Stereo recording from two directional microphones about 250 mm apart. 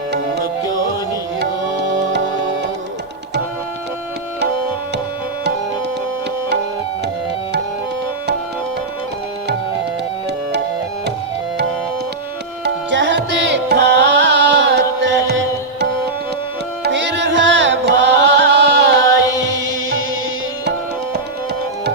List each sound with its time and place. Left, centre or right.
12.6 s music: right